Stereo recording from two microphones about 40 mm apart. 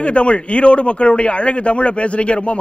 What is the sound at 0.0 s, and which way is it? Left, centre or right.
A man's voice, left.